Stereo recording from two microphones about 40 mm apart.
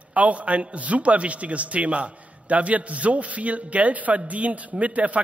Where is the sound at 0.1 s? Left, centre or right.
Right.